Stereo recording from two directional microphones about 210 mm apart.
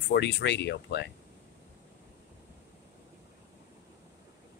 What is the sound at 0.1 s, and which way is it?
Speech, 55° left (ahead or behind).